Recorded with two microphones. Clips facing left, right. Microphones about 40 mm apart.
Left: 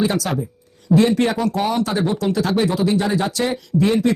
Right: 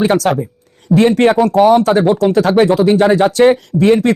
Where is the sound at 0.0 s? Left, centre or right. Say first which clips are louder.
Right 7 dB; right.